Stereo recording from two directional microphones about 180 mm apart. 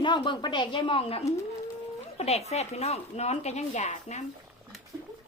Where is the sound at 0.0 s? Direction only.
25° left (ahead or behind).